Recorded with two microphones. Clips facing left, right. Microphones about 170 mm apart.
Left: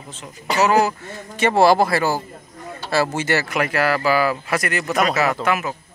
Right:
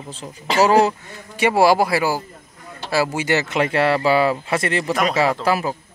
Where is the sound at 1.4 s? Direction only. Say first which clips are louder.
Even; 10° right (ahead or behind).